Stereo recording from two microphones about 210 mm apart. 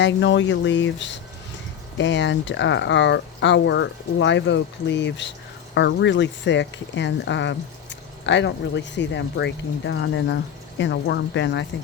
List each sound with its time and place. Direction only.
0.0 s speech: 55° left (ahead or behind)